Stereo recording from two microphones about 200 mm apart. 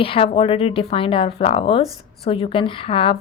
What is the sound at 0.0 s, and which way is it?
Speech, 30° left (ahead or behind).